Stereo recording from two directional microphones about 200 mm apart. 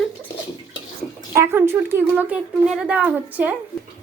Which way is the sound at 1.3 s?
10° right (ahead or behind).